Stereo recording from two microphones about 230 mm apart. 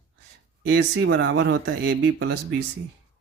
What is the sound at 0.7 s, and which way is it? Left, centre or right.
Speech, right.